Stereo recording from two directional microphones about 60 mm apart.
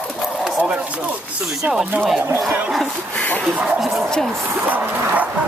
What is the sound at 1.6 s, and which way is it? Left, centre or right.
Speech, centre.